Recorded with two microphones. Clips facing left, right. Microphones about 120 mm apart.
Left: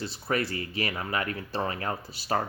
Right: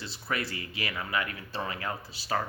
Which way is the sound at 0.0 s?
45° left (ahead or behind).